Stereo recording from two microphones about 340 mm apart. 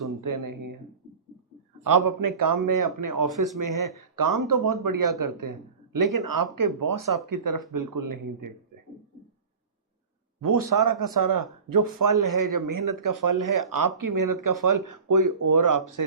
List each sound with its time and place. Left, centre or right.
0.2 s speech: right
1.8 s speech: right
10.4 s speech: right